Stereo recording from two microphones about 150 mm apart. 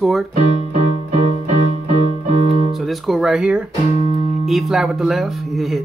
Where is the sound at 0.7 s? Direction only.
45° right (ahead or behind).